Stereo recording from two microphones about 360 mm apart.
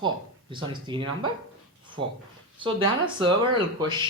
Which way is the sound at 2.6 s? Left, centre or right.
Centre.